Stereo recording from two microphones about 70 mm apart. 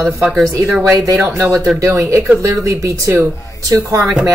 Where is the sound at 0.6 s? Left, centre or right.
Right.